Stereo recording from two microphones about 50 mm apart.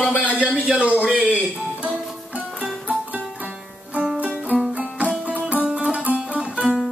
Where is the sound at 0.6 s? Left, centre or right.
Centre.